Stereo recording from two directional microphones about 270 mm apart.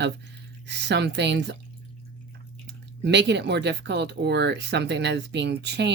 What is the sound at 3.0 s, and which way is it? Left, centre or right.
Speech, right.